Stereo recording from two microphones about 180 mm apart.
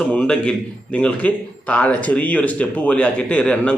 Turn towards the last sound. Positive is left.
turn(degrees=5)  # may be behind; listen again after turning